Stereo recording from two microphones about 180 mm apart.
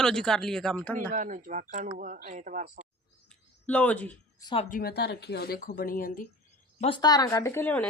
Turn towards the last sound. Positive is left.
turn(degrees=10)  # may be behind; listen again after turning